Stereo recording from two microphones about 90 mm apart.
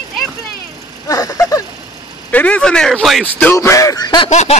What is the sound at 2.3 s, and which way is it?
Speech, 15° left (ahead or behind).